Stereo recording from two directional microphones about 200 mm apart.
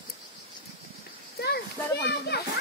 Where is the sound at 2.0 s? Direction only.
55° left (ahead or behind).